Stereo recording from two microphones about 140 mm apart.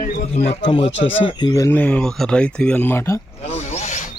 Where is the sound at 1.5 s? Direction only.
25° left (ahead or behind).